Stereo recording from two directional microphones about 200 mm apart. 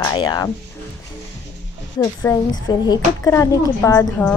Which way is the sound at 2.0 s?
15° left (ahead or behind).